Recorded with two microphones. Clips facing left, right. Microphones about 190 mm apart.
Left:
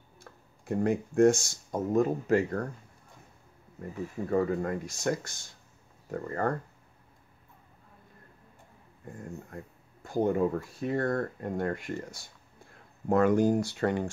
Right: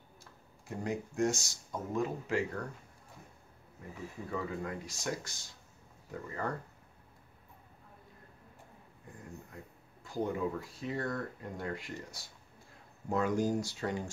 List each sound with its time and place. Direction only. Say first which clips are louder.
0.2 s speech: left 4 dB; 55° left (ahead or behind)
4.3 s speech: left 10 dB; 45° left (ahead or behind)
10.0 s speech: left 8 dB; 50° left (ahead or behind)